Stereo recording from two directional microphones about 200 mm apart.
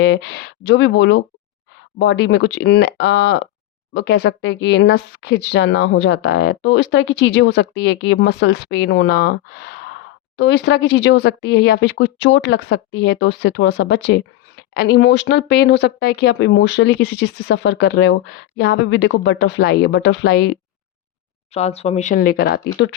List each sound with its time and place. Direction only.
0.0 s speech: 60° left (ahead or behind)
21.5 s speech: 30° left (ahead or behind); by 23.0 s 60° left (ahead or behind)